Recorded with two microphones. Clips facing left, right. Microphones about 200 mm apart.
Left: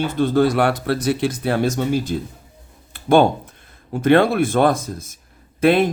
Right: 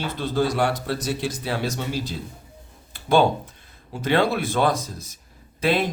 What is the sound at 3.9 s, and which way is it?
Speech, 50° left (ahead or behind).